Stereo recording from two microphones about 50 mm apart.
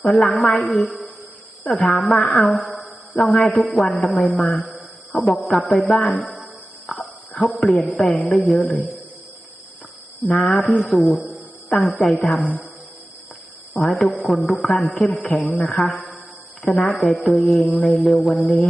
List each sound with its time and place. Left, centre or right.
0.0 s a woman's voice: centre
10.4 s a sound: centre
10.8 s a woman's voice: centre
13.8 s a woman's voice: centre